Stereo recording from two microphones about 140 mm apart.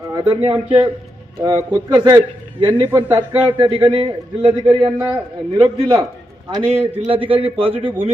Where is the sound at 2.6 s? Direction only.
30° right (ahead or behind).